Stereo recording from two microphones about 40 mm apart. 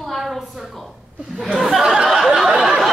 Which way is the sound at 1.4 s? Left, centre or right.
Centre.